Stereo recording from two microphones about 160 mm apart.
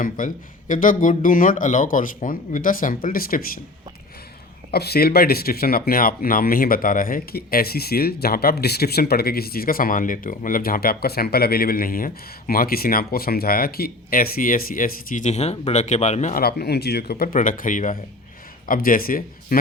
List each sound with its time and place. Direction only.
0.2 s speech: 55° left (ahead or behind)
4.7 s speech: 80° left; by 16.4 s 45° left (ahead or behind)
16.4 s speech: 85° left; by 19.5 s 60° left (ahead or behind)